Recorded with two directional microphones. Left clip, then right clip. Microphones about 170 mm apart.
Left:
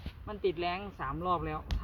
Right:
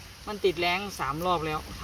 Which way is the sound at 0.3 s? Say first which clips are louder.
Right 7 dB; centre (ahead or behind).